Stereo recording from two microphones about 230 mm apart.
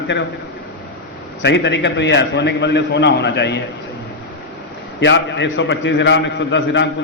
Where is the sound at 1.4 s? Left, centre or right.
Left.